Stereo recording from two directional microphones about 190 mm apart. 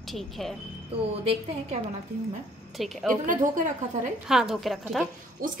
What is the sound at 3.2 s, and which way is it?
Speech, 45° right (ahead or behind).